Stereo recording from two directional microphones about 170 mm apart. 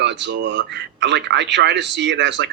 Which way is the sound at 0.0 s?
90° right.